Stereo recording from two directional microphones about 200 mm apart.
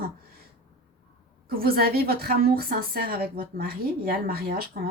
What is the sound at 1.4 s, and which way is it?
A woman's voice, 50° right (ahead or behind).